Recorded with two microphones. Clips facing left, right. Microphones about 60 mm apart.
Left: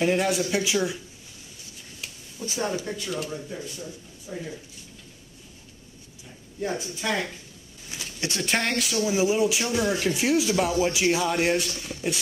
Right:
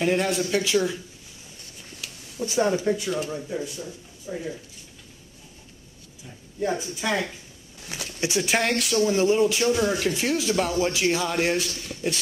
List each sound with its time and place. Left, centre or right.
0.0 s speech: centre
0.7 s speech: centre
2.5 s speech: right
6.6 s speech: centre
7.9 s speech: right
8.3 s speech: centre